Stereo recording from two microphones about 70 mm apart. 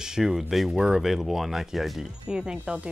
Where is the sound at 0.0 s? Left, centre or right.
Centre.